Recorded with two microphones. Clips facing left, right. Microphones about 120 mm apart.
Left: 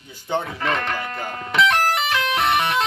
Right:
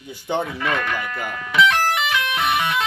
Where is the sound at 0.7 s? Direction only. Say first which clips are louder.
Even; 30° left (ahead or behind).